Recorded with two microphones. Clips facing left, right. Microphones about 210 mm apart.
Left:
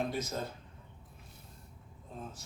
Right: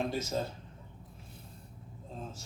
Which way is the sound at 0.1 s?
25° right (ahead or behind).